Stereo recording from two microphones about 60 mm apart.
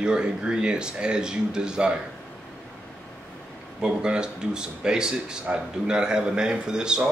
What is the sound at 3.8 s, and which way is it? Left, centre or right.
Speech, centre.